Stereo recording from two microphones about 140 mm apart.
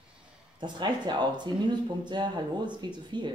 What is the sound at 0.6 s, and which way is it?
Speech, 30° right (ahead or behind).